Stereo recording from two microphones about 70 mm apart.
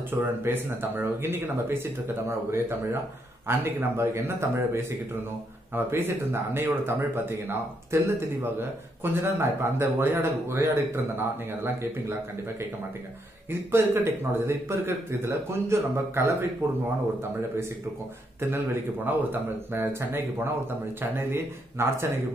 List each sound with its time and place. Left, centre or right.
0.1 s speech: right
13.5 s speech: right
19.0 s speech: right